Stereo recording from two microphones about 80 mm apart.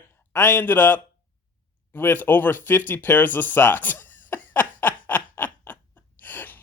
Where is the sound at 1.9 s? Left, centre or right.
Left.